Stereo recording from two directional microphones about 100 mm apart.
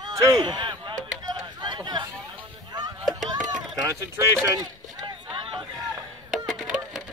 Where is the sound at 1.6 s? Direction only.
50° right (ahead or behind).